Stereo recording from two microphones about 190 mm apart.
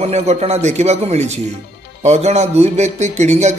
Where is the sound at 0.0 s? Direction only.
35° right (ahead or behind).